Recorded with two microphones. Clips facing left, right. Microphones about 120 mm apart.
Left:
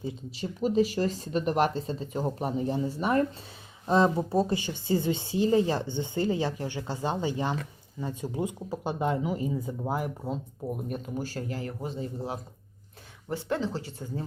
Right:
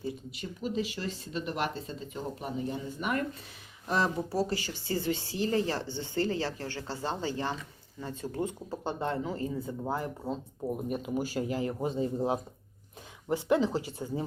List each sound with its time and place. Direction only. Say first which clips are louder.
0.3 s speech: left 7 dB; 30° left (ahead or behind); by 14.3 s 15° right (ahead or behind)